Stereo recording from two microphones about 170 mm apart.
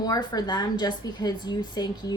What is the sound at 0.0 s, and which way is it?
A woman's voice, 25° left (ahead or behind).